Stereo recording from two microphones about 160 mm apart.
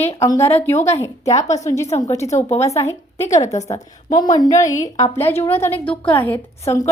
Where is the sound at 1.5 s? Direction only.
45° left (ahead or behind).